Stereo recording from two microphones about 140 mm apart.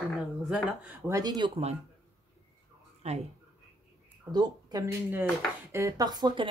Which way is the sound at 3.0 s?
50° right (ahead or behind).